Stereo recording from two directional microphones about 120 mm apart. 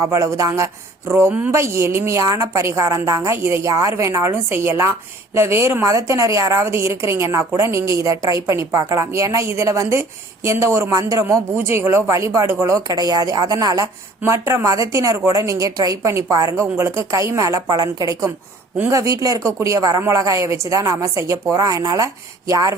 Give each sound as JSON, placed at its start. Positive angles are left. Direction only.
{"t": 0.0, "sound": "a woman's voice", "side_deg": -25}
{"t": 1.5, "sound": "a woman's voice", "side_deg": -25}